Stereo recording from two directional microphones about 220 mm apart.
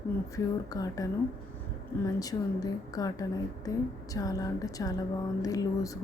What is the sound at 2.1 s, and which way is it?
A woman's voice, 15° left (ahead or behind).